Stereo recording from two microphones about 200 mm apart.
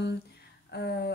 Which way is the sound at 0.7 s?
55° left (ahead or behind).